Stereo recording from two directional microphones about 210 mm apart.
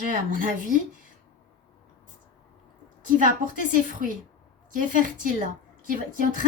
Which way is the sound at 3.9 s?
40° right (ahead or behind).